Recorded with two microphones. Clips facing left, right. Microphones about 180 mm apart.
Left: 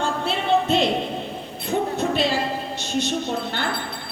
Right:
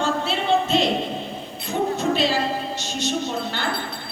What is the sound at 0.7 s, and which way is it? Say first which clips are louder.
Speech: left 1 dB; 55° left (ahead or behind).